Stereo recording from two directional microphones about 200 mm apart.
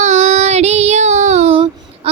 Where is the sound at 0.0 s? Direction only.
35° right (ahead or behind).